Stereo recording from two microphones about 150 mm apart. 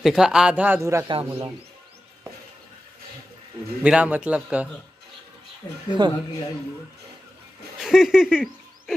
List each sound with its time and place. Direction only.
0.0 s a man's voice: 5° right (ahead or behind)
1.0 s speech: 35° right (ahead or behind)
3.8 s a man's voice: 10° right (ahead or behind)
5.9 s speech: 30° right (ahead or behind)
7.8 s a sound: 5° right (ahead or behind)